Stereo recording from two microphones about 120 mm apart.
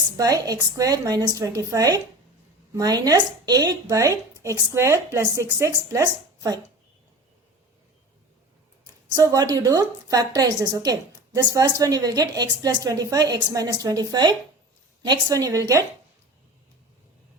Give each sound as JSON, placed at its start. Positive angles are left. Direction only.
{"t": 0.2, "sound": "a woman's voice", "side_deg": -30}
{"t": 8.8, "sound": "a woman's voice", "side_deg": -30}